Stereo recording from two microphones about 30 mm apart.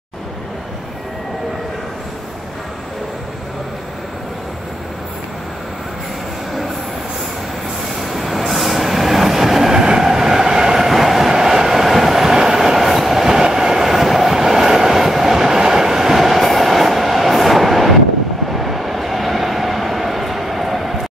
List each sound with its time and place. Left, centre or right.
8.0 s train: centre
9.8 s train: centre
10.9 s train: centre
18.5 s vehicle: centre